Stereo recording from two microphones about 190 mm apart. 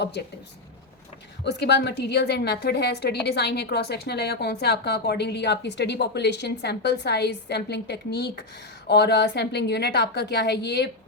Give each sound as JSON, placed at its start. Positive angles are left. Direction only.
{"t": 0.0, "sound": "a woman's voice", "side_deg": 60}
{"t": 1.5, "sound": "a woman's voice", "side_deg": 65}